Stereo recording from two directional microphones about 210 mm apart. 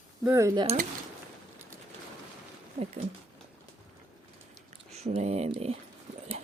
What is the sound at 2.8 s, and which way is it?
Speech, 40° right (ahead or behind).